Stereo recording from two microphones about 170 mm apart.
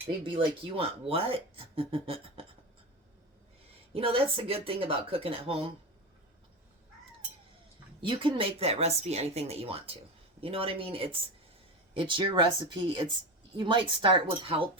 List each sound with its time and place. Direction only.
0.2 s speech: 30° right (ahead or behind)
3.9 s speech: 35° right (ahead or behind)
8.0 s speech: 30° right (ahead or behind)